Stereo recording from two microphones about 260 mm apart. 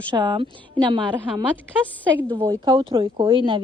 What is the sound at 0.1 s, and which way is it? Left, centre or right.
Speech, centre.